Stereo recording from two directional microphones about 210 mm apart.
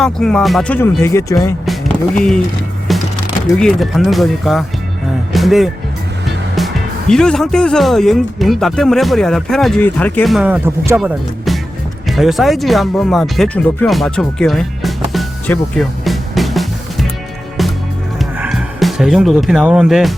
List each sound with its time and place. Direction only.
0.0 s speech: 5° left (ahead or behind)
1.6 s music: centre (ahead or behind)
3.6 s speech: centre (ahead or behind)
5.3 s music: centre (ahead or behind)
7.1 s speech: 5° left (ahead or behind)
17.6 s music: centre (ahead or behind)